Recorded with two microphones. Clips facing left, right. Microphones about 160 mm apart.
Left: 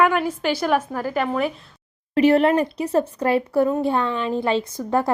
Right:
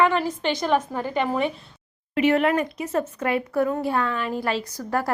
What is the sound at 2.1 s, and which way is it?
A woman's voice, 35° left (ahead or behind).